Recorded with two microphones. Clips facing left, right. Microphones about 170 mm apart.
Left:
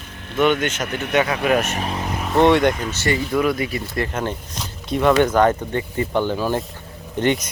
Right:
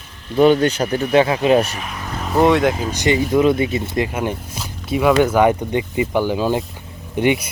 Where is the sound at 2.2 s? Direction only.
Centre (ahead or behind).